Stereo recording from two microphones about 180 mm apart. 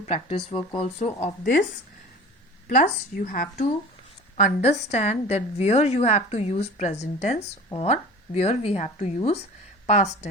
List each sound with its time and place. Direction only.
0.0 s a woman's voice: 35° left (ahead or behind)
2.6 s a woman's voice: 45° left (ahead or behind)